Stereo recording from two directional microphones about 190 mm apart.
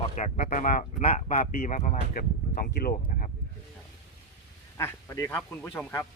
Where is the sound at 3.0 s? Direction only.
50° left (ahead or behind).